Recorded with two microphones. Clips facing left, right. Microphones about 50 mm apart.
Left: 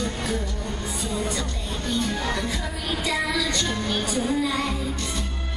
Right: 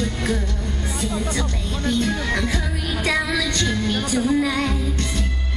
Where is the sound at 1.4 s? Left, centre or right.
Right.